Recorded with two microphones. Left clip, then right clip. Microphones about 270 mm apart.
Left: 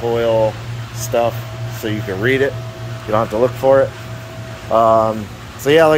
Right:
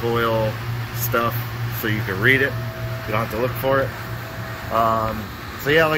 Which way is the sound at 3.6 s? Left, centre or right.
Centre.